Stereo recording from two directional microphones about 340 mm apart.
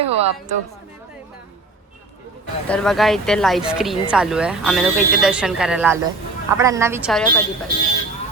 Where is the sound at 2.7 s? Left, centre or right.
Centre.